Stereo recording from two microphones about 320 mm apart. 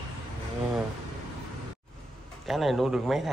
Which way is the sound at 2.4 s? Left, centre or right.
Centre.